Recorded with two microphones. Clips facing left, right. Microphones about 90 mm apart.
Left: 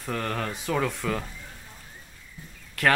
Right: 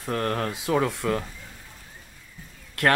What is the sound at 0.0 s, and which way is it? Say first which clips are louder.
Speech: right 3 dB; 5° right (ahead or behind).